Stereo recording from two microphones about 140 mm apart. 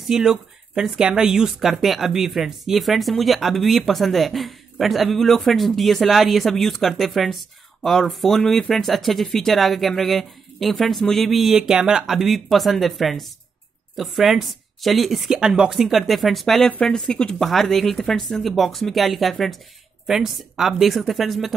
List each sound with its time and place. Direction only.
0.1 s speech: 5° right (ahead or behind)